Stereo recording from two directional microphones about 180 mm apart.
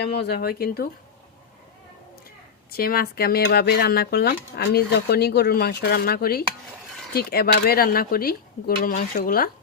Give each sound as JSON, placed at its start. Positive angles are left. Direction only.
{"t": 0.0, "sound": "speech", "side_deg": 65}
{"t": 2.7, "sound": "speech", "side_deg": 55}